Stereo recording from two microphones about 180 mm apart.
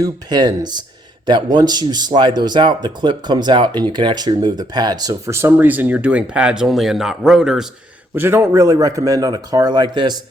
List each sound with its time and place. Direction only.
0.0 s speech: 20° right (ahead or behind)